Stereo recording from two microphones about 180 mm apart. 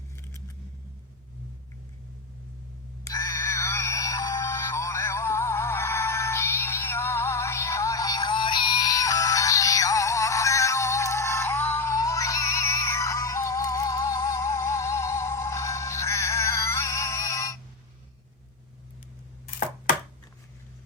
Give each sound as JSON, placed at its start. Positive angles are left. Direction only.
{"t": 0.2, "sound": "vehicle", "side_deg": 15}
{"t": 3.0, "sound": "music", "side_deg": 20}